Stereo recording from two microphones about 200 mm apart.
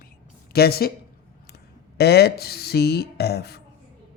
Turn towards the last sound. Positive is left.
turn(degrees=55)  # may be behind; listen again after turning